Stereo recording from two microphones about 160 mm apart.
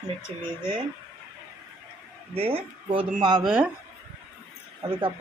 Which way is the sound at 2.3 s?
35° right (ahead or behind).